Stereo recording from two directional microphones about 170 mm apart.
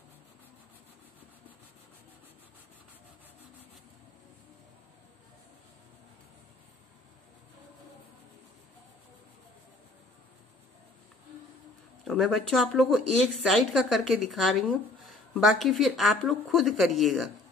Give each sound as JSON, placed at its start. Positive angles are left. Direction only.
{"t": 12.0, "sound": "speech", "side_deg": 0}